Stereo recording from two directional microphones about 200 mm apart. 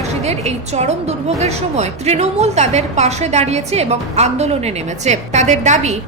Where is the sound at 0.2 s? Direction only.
35° right (ahead or behind).